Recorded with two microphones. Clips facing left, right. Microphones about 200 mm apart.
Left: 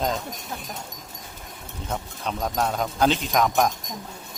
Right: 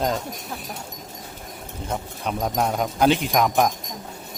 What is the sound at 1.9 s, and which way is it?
Speech, 10° right (ahead or behind).